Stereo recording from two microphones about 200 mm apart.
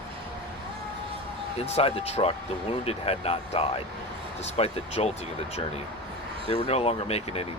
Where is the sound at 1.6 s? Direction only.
30° left (ahead or behind).